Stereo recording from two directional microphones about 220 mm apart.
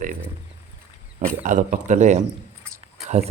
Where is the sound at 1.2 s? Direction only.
35° right (ahead or behind).